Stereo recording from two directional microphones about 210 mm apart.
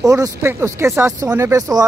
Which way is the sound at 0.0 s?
15° right (ahead or behind).